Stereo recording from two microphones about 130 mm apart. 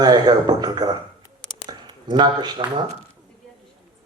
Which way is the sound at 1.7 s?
35° right (ahead or behind).